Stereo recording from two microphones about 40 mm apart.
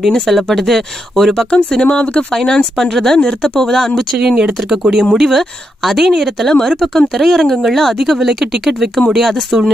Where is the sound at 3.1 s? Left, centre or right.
Left.